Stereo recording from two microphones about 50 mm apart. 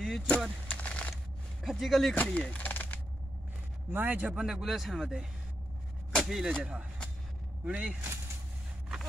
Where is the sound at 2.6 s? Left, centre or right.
Left.